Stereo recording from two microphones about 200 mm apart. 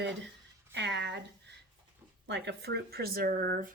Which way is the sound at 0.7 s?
60° right (ahead or behind).